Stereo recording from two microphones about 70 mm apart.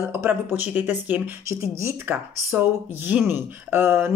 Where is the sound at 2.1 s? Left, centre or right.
Right.